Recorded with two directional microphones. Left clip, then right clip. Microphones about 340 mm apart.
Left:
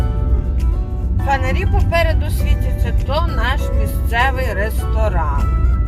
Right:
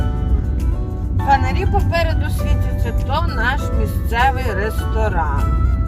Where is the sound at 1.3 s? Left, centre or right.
Centre.